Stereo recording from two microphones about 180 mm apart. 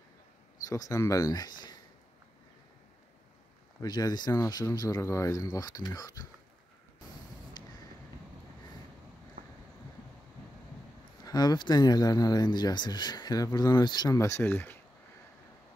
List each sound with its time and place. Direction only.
0.7 s speech: 20° left (ahead or behind)
3.8 s speech: 20° left (ahead or behind)
7.6 s vehicle: 25° left (ahead or behind)
11.2 s speech: 20° left (ahead or behind)